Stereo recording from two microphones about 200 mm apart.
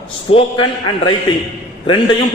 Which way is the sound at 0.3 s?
25° left (ahead or behind).